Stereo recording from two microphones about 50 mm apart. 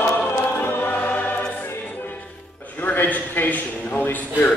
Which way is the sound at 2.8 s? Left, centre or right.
Left.